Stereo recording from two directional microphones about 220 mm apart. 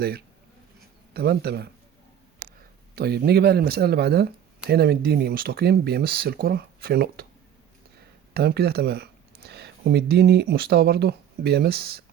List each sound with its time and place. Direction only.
1.1 s speech: 45° right (ahead or behind)
2.9 s speech: 45° right (ahead or behind)
8.3 s speech: 45° right (ahead or behind)